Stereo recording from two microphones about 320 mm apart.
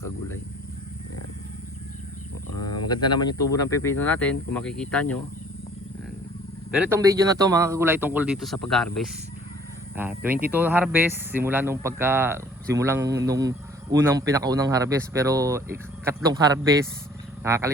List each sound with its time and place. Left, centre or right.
2.6 s speech: left
3.2 s speech: centre
6.7 s speech: centre